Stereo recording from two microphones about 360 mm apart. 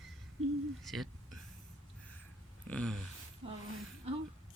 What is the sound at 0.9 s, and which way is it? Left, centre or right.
Speech, centre.